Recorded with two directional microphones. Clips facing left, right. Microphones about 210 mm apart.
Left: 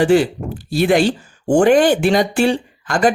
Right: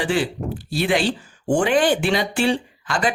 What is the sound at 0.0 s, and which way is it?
Speech, 45° left (ahead or behind).